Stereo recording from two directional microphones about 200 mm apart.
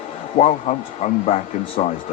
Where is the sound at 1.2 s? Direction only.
30° left (ahead or behind).